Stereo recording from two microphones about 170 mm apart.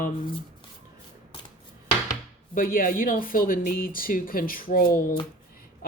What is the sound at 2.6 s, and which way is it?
Speech, 55° left (ahead or behind).